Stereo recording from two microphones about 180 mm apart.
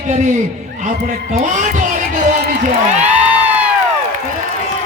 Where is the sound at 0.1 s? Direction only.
40° right (ahead or behind).